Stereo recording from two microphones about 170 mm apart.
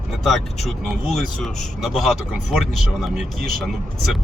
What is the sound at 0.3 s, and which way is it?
Speech, centre (ahead or behind).